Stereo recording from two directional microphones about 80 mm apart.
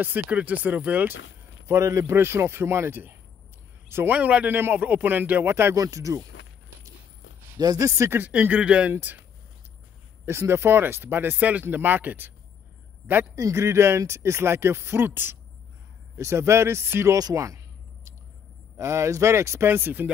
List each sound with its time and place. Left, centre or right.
0.0 s speech: centre
1.7 s speech: right
4.1 s speech: centre
5.8 s speech: right
7.5 s speech: right
7.9 s speech: right
8.2 s speech: centre
10.2 s a man's voice: right
13.4 s speech: right
18.8 s speech: right